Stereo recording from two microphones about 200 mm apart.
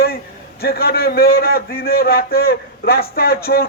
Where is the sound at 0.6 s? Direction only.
50° left (ahead or behind).